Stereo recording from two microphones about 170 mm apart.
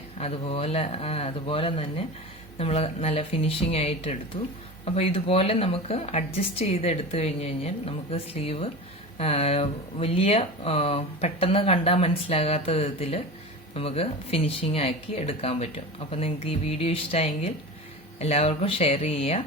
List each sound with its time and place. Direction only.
0.2 s speech: 35° left (ahead or behind)